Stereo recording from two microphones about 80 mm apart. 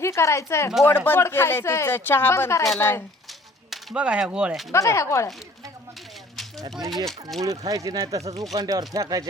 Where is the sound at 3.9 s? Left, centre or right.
Centre.